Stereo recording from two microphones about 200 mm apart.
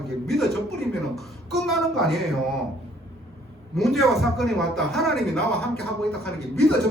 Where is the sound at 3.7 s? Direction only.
Centre (ahead or behind).